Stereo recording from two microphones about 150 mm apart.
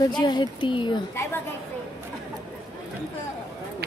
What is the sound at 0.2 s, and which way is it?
Speech, 30° left (ahead or behind).